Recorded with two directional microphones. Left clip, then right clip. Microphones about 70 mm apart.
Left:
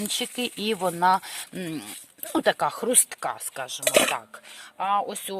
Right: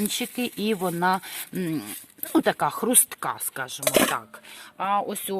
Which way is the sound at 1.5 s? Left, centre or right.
Centre.